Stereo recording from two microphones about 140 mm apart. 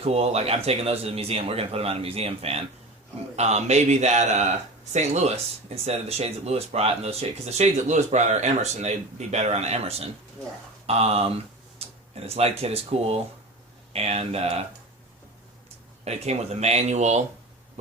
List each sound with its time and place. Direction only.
0.0 s speech: 45° right (ahead or behind)
11.8 s tick-tock: 45° right (ahead or behind)
12.1 s speech: 45° right (ahead or behind)
16.0 s speech: 50° right (ahead or behind)